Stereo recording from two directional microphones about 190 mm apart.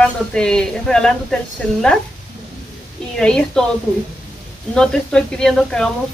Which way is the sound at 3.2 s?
5° left (ahead or behind).